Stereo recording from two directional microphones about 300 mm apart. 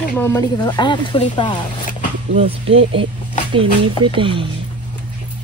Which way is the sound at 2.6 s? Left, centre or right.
Right.